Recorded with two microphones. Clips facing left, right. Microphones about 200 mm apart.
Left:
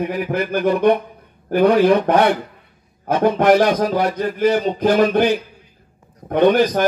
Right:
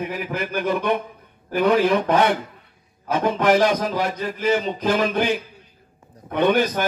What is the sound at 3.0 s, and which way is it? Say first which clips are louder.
Speech: left 5 dB; 55° left (ahead or behind).